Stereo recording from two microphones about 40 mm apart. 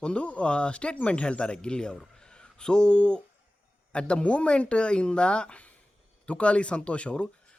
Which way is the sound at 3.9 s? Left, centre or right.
Left.